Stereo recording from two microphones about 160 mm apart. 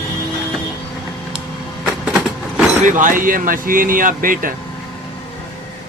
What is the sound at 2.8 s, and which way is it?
Speech, 55° right (ahead or behind).